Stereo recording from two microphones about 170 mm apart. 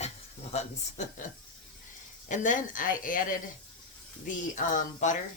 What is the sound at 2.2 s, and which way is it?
Speech, 50° left (ahead or behind).